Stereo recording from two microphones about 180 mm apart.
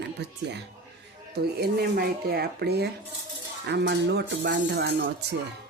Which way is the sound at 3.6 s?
70° right (ahead or behind).